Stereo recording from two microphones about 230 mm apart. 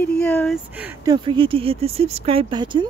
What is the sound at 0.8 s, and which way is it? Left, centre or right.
Speech, centre.